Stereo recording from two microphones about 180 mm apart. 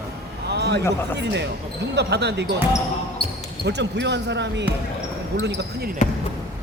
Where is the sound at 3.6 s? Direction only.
70° right (ahead or behind).